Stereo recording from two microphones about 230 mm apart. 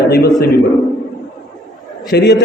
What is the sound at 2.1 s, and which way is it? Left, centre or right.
Speech, left.